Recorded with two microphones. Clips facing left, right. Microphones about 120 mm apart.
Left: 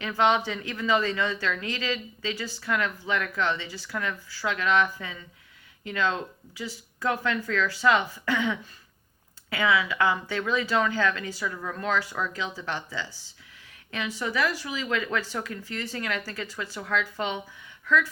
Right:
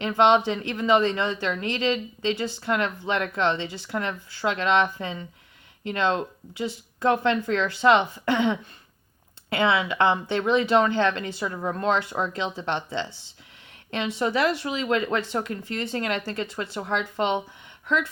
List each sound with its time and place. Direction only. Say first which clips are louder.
0.0 s speech: right 5 dB; 25° right (ahead or behind)